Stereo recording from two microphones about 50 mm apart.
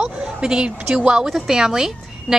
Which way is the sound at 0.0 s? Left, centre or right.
Centre.